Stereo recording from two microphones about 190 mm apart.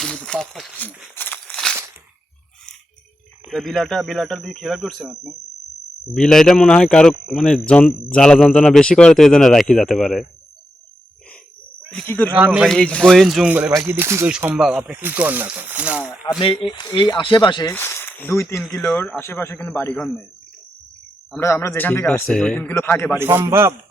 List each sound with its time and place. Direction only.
0.0 s speech: 5° left (ahead or behind)
1.1 s a sound: 10° left (ahead or behind)
3.5 s speech: centre (ahead or behind)
11.9 s speech: 5° left (ahead or behind)
16.4 s a man's voice: 30° left (ahead or behind); by 20.2 s 10° left (ahead or behind)
21.3 s a man's voice: 15° left (ahead or behind)
23.1 s a man's voice: 15° right (ahead or behind)